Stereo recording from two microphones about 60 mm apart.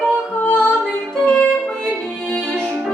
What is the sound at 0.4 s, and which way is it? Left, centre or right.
Music, left.